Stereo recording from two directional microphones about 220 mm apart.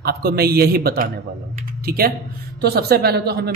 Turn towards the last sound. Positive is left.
turn(degrees=-45)  # may be behind; listen again after turning